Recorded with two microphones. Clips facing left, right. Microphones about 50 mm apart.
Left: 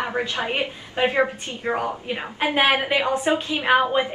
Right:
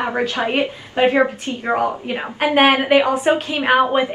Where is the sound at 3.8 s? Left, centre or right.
Right.